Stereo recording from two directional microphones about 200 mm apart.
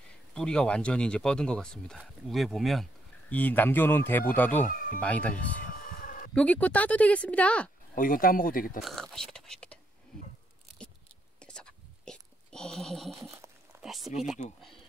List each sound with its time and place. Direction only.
0.3 s speech: 5° left (ahead or behind)
5.8 s a sound: 45° left (ahead or behind)
6.3 s speech: 5° left (ahead or behind)
7.9 s speech: 45° left (ahead or behind)
8.8 s speech: centre (ahead or behind)
11.3 s a sound: 5° left (ahead or behind)
13.2 s speech: 15° right (ahead or behind)
13.8 s speech: centre (ahead or behind)